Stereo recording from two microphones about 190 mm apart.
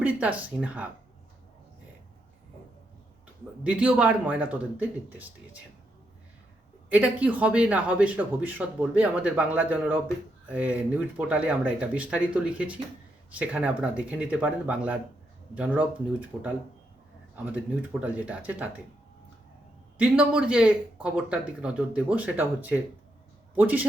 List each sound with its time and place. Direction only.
0.0 s a man's voice: 5° right (ahead or behind)
3.6 s a man's voice: 5° right (ahead or behind)
6.9 s a man's voice: 5° right (ahead or behind)
16.3 s a man's voice: 20° right (ahead or behind)
20.0 s a man's voice: 5° right (ahead or behind)